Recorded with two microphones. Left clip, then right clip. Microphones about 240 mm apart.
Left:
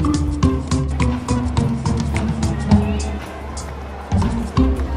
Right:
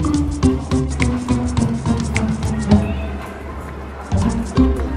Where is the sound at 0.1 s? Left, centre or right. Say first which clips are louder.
Right 2 dB; centre.